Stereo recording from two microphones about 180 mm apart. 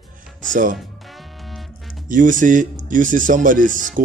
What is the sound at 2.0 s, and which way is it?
Speech, 45° right (ahead or behind).